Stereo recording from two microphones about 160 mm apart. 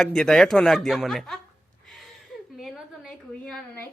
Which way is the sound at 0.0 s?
5° left (ahead or behind).